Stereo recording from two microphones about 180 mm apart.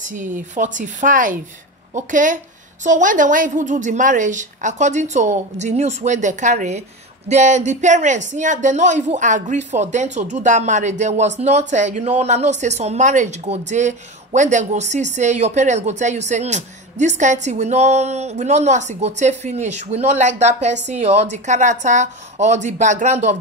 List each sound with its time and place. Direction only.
0.0 s a woman's voice: 45° right (ahead or behind)